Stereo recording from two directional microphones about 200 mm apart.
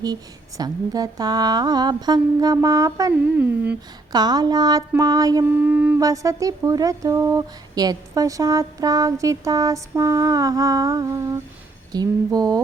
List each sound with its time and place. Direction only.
0.0 s speech: 20° right (ahead or behind)
4.1 s mantra: 20° right (ahead or behind)
11.9 s speech: 20° right (ahead or behind)